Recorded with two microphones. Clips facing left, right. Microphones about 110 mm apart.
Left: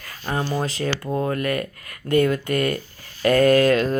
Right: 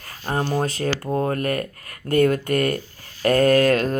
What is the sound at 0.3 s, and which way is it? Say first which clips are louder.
Speech: right 2 dB; 45° right (ahead or behind).